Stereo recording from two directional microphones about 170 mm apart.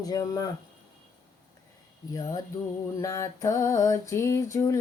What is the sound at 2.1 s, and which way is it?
Speech, 20° left (ahead or behind).